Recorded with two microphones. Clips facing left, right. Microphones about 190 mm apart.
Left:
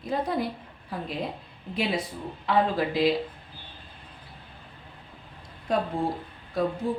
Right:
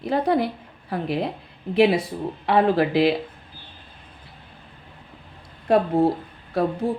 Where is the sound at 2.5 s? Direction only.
70° right (ahead or behind).